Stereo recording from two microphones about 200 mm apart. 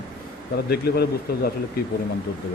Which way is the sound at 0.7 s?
50° left (ahead or behind).